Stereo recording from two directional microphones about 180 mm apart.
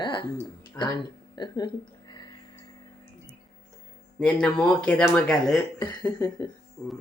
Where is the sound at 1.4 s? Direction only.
25° left (ahead or behind).